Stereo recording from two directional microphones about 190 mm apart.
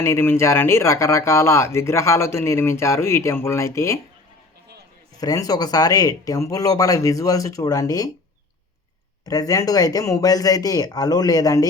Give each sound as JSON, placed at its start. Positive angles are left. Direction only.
{"t": 0.0, "sound": "speech", "side_deg": 15}
{"t": 5.1, "sound": "speech", "side_deg": 20}
{"t": 9.2, "sound": "speech", "side_deg": 20}